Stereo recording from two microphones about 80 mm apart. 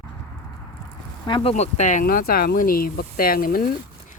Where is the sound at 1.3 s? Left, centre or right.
Left.